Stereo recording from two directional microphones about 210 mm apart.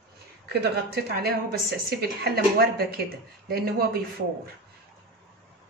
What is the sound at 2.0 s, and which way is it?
Speech, 50° right (ahead or behind).